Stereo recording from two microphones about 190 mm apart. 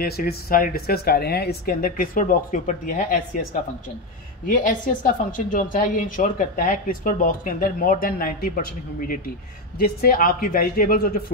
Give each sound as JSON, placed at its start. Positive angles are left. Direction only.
{"t": 0.0, "sound": "a woman's voice", "side_deg": 50}
{"t": 4.5, "sound": "a woman's voice", "side_deg": 45}